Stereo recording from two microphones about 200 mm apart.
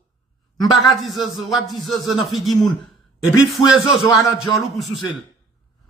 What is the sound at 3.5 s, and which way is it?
Speech, centre (ahead or behind).